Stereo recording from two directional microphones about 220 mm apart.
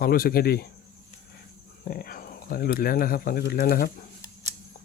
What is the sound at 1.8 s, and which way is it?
Speech, 40° left (ahead or behind).